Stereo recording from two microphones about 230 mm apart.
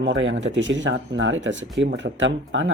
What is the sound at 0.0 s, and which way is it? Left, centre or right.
Speech, right.